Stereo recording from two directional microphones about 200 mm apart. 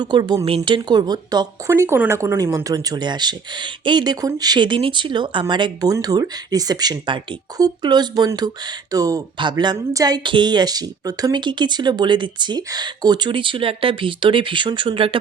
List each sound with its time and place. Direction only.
0.0 s speech: 20° right (ahead or behind)